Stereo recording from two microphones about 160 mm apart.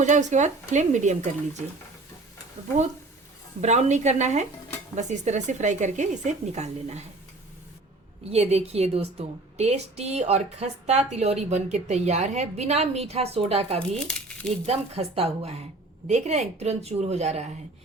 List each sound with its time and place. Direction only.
0.0 s a woman's voice: 50° right (ahead or behind)
3.6 s a woman's voice: 45° right (ahead or behind)
8.3 s a woman's voice: 40° right (ahead or behind)
13.7 s speech: 5° left (ahead or behind)
14.7 s a woman's voice: 40° right (ahead or behind)